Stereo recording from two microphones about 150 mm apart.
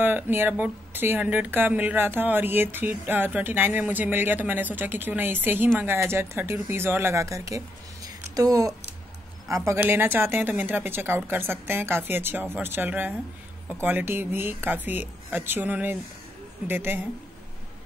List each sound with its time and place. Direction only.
0.0 s speech: 15° right (ahead or behind)
9.7 s speech: 15° right (ahead or behind)